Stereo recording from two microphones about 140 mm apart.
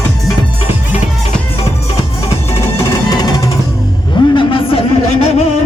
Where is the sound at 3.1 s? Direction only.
25° left (ahead or behind).